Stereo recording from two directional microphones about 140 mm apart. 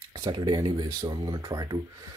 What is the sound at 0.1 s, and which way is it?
Speech, 25° right (ahead or behind).